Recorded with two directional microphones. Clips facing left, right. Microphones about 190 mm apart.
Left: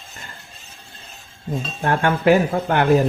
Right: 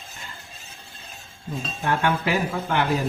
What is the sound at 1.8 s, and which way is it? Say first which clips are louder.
Speech: left 6 dB; 50° left (ahead or behind).